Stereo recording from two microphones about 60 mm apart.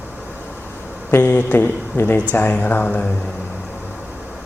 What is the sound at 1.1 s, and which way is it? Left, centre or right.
Speech, left.